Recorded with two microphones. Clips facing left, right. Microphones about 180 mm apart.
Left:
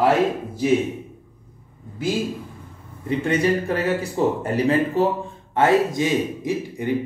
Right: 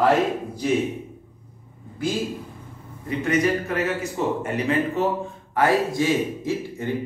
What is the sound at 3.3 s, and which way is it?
Speech, 30° left (ahead or behind).